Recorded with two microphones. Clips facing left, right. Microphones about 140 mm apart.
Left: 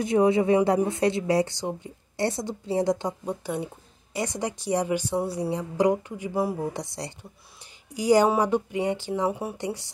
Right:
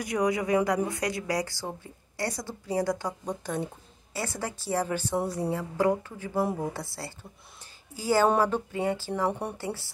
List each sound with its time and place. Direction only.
0.0 s a woman's voice: 25° left (ahead or behind)
3.3 s a woman's voice: 10° left (ahead or behind)
9.3 s speech: 5° left (ahead or behind)
9.6 s a woman's voice: 20° left (ahead or behind)